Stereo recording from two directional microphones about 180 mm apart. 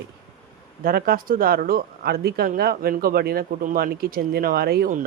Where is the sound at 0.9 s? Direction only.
55° right (ahead or behind).